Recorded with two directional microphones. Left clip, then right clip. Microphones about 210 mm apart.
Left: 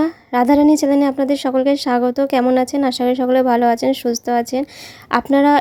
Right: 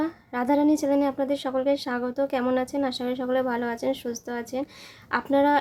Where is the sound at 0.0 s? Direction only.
35° left (ahead or behind).